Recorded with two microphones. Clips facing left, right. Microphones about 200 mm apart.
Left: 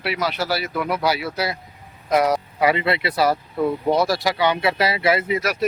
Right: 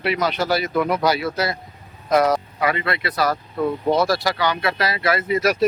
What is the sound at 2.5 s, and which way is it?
Speech, 25° left (ahead or behind).